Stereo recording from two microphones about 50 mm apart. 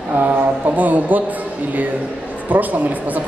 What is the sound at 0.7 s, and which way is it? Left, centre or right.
Speech, right.